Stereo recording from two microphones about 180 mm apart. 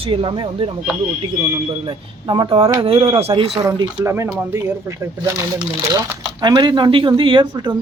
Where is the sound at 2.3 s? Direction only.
30° right (ahead or behind).